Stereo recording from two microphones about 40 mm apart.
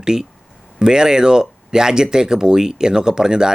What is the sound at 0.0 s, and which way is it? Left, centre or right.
Speech, centre.